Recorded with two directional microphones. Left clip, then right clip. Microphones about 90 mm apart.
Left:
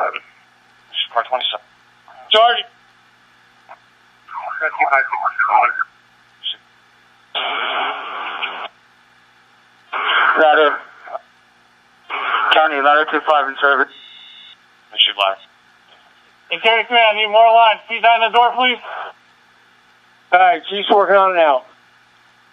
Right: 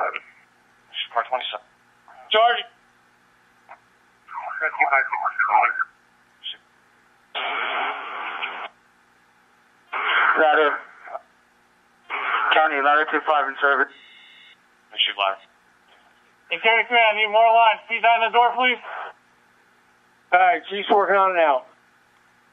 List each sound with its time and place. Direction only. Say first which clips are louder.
0.9 s radio: left 6 dB; 25° left (ahead or behind)
2.0 s a sound: left 5 dB; 20° left (ahead or behind)
4.3 s speech: left 4 dB; 25° left (ahead or behind)
6.4 s a sound: left 9 dB; 25° left (ahead or behind)
7.3 s radio: left 5 dB; 25° left (ahead or behind)
9.8 s radio: left 4 dB; 25° left (ahead or behind)
16.4 s a man's voice: left 4 dB; 25° left (ahead or behind)
20.2 s a man's voice: left 5 dB; 25° left (ahead or behind)